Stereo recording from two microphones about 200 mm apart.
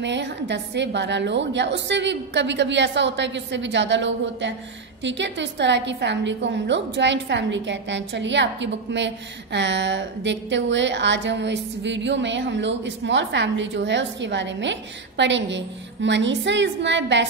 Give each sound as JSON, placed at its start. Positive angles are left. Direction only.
{"t": 0.0, "sound": "a woman's voice", "side_deg": -60}